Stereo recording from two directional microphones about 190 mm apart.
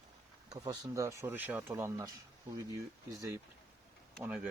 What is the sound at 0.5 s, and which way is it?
Speech, 20° right (ahead or behind).